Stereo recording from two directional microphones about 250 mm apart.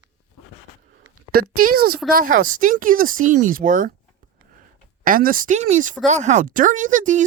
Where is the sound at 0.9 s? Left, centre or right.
Right.